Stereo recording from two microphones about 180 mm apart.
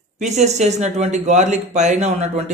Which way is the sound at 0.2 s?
40° right (ahead or behind).